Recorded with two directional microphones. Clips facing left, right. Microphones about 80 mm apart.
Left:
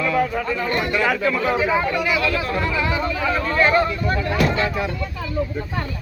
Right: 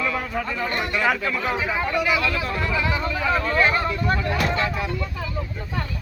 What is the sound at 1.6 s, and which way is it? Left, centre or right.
Speech, centre.